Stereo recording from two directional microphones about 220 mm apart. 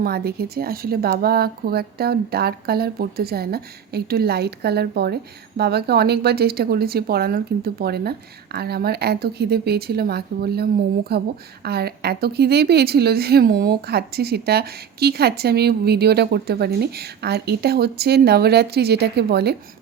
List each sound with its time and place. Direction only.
0.0 s speech: 45° right (ahead or behind)